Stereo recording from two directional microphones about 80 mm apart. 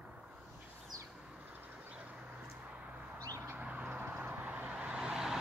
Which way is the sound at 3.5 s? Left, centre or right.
Centre.